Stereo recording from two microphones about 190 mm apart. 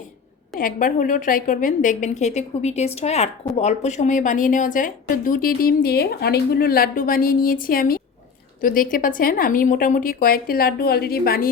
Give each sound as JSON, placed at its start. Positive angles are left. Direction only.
{"t": 0.6, "sound": "a woman's voice", "side_deg": 45}